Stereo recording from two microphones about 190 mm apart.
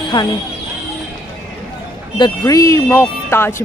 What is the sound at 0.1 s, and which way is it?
Speech, 20° left (ahead or behind).